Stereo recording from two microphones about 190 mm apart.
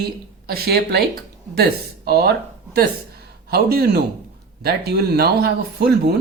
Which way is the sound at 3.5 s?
55° right (ahead or behind).